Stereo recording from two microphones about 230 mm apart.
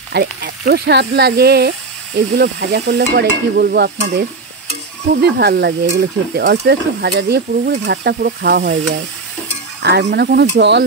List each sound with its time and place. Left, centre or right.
0.1 s stir: right
4.0 s stir: right
5.1 s stir: right
9.8 s stir: right